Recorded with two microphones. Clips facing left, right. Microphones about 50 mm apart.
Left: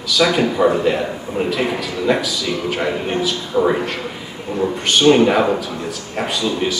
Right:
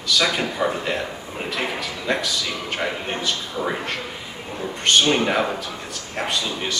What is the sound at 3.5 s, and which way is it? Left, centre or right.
Speech, left.